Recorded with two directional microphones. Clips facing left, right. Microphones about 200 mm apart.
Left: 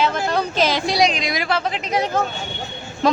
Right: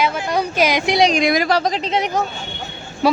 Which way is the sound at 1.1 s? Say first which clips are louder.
Right 6 dB; 45° right (ahead or behind).